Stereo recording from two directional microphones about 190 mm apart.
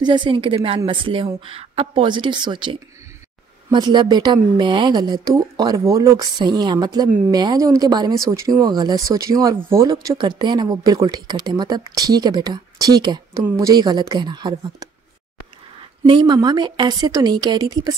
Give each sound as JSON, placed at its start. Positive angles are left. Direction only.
{"t": 0.0, "sound": "speech", "side_deg": -25}
{"t": 16.1, "sound": "speech", "side_deg": -25}